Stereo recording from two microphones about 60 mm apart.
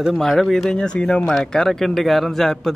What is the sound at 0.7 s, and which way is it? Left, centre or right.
A man's voice, centre.